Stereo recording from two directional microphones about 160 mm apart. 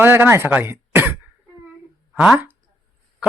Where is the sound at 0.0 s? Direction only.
15° right (ahead or behind).